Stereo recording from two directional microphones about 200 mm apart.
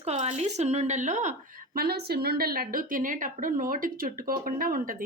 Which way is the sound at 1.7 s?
50° right (ahead or behind).